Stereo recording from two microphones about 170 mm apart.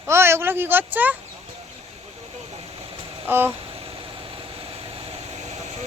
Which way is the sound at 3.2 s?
10° right (ahead or behind).